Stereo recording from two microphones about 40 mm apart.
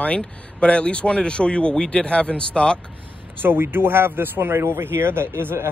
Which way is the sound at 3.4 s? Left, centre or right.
Right.